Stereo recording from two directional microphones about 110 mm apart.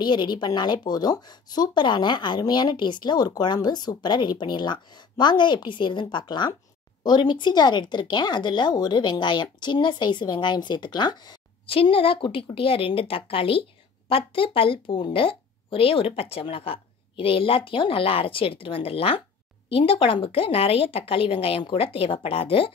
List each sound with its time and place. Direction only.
0.0 s a woman's voice: 40° left (ahead or behind)
11.6 s speech: 60° left (ahead or behind)